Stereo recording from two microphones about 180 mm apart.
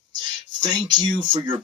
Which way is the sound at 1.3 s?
25° right (ahead or behind).